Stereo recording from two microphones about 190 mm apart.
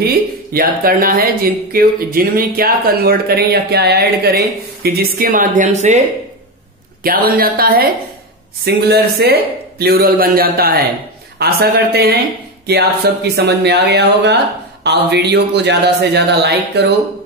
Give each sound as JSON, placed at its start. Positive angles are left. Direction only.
{"t": 0.0, "sound": "speech", "side_deg": -50}
{"t": 7.0, "sound": "speech", "side_deg": -50}